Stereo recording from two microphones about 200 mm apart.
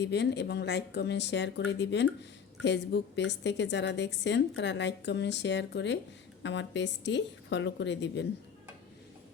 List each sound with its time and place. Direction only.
0.0 s a woman's voice: 55° left (ahead or behind)